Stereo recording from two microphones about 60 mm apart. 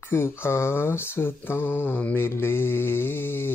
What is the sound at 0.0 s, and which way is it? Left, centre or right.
Mantra, left.